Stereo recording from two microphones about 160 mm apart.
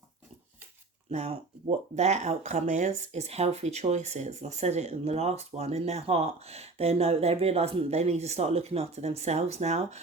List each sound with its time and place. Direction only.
1.1 s speech: 40° right (ahead or behind)